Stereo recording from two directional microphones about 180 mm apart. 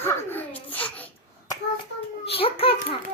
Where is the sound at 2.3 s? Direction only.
30° left (ahead or behind).